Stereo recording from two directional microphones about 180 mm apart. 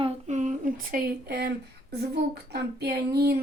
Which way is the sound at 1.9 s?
65° right (ahead or behind).